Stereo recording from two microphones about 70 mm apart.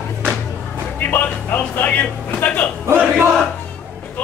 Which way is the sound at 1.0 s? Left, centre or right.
Left.